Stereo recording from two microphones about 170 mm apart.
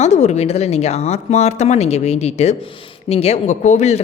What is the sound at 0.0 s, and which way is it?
Speech, 40° left (ahead or behind).